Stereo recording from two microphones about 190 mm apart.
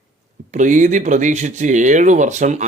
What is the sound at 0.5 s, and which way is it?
Speech, 40° right (ahead or behind).